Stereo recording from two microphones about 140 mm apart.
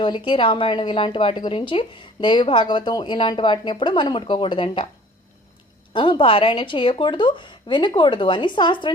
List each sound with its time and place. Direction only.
0.0 s speech: 35° left (ahead or behind)
5.9 s speech: 35° left (ahead or behind)